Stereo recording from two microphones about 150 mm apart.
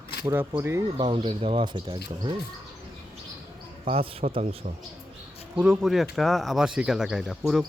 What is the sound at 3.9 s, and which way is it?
Speech, 40° right (ahead or behind).